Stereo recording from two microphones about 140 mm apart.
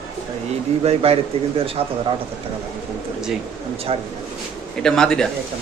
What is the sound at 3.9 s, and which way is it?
Speech, 50° right (ahead or behind).